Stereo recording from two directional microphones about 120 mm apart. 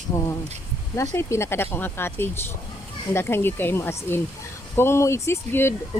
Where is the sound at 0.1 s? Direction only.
20° left (ahead or behind).